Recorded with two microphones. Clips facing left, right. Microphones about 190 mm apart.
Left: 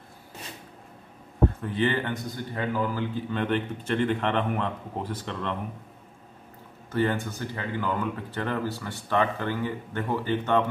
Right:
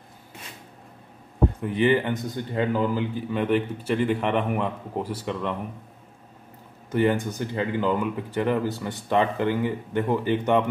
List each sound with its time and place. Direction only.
1.6 s a man's voice: 15° right (ahead or behind)
6.9 s a man's voice: 15° right (ahead or behind)